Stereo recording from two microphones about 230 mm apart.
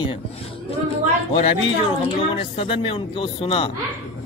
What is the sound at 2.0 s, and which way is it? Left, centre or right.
Speech, left.